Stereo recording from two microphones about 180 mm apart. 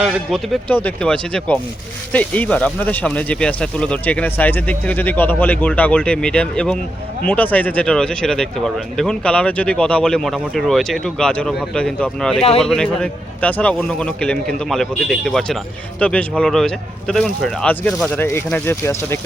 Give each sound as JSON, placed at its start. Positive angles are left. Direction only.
{"t": 0.0, "sound": "speech", "side_deg": 0}
{"t": 12.4, "sound": "speech", "side_deg": 35}
{"t": 12.6, "sound": "speech", "side_deg": 5}